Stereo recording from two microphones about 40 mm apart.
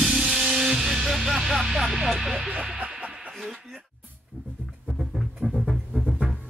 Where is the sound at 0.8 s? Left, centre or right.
Centre.